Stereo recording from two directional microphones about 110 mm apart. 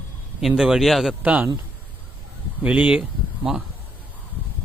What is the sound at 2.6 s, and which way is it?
Speech, 10° right (ahead or behind).